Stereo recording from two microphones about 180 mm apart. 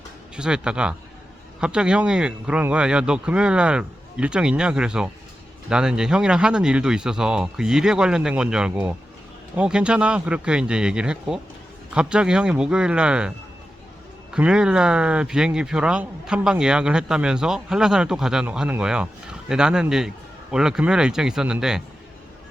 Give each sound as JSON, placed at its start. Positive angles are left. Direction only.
{"t": 0.3, "sound": "speech", "side_deg": -5}
{"t": 14.3, "sound": "speech", "side_deg": -5}